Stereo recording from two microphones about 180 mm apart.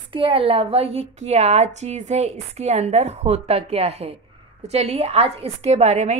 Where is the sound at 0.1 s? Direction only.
30° right (ahead or behind).